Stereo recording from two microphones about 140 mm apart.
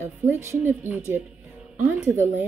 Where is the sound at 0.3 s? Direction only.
15° right (ahead or behind).